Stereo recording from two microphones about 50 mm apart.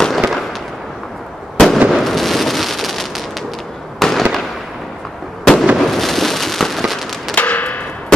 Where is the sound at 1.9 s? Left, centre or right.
Centre.